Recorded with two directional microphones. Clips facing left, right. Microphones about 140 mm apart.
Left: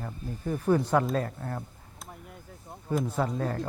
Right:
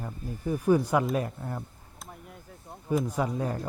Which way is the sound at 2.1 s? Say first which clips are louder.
Even; centre (ahead or behind).